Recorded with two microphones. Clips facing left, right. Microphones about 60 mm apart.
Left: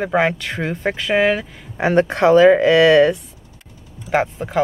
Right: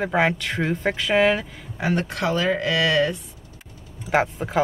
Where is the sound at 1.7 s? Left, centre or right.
Left.